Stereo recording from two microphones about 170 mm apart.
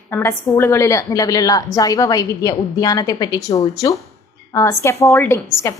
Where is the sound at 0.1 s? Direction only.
15° left (ahead or behind).